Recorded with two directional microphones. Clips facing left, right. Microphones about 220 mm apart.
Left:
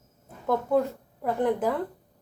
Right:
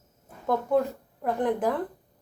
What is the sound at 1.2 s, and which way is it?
Speech, 10° left (ahead or behind).